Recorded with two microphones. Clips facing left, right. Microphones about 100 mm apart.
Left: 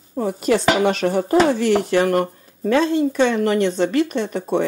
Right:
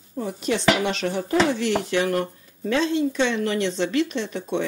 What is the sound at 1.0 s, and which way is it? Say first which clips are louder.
Speech: left 5 dB; 40° left (ahead or behind).